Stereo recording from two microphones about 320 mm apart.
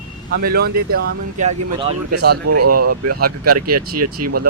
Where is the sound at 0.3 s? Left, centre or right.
Right.